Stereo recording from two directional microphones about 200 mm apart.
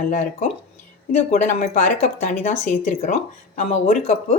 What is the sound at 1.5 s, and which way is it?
Speech, 40° left (ahead or behind).